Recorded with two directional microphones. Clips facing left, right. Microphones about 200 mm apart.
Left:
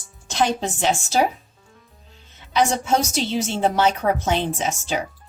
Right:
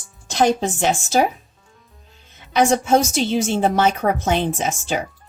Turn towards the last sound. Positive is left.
turn(degrees=-50)  # may be behind; listen again after turning